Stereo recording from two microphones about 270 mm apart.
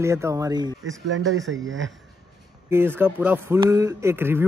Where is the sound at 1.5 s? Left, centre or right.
Right.